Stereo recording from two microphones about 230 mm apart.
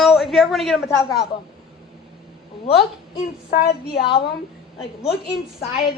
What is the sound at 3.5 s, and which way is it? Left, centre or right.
Speech, left.